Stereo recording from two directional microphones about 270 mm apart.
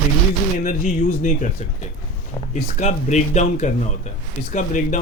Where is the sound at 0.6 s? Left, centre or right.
Left.